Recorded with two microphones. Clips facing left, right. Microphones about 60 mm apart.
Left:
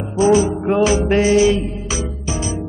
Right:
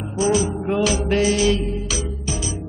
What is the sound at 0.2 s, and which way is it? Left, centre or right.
Music, left.